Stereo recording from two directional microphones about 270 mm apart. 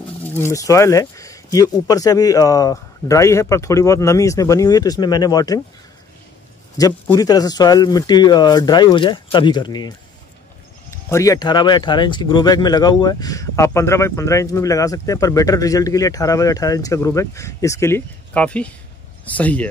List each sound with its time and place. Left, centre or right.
0.3 s speech: centre
6.8 s speech: centre